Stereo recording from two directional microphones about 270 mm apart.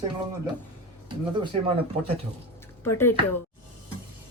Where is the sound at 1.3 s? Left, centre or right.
Centre.